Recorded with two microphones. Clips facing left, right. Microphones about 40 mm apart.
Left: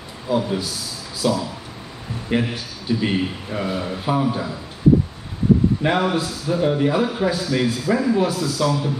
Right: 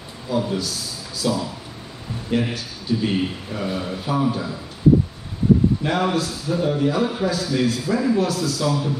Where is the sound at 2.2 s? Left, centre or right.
Left.